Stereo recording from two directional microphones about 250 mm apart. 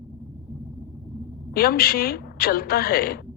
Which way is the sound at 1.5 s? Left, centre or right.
Left.